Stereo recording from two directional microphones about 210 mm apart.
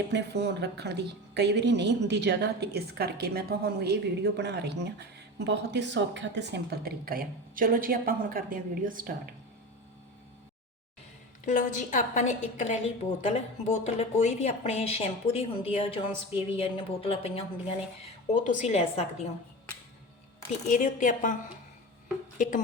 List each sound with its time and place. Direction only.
0.1 s a woman's voice: 55° right (ahead or behind)
11.4 s a woman's voice: 35° left (ahead or behind)
20.7 s a woman's voice: 40° left (ahead or behind)
22.4 s speech: 40° left (ahead or behind)